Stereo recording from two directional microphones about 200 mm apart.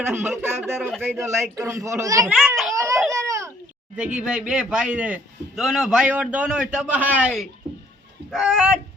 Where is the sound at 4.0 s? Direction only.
5° right (ahead or behind).